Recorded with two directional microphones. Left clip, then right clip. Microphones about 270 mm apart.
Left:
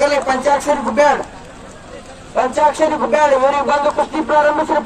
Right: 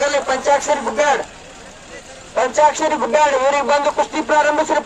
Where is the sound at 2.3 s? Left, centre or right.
Right.